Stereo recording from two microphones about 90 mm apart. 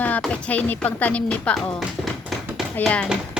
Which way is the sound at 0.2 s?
15° left (ahead or behind).